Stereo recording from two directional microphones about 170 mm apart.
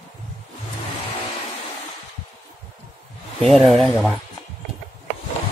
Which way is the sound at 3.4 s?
Centre (ahead or behind).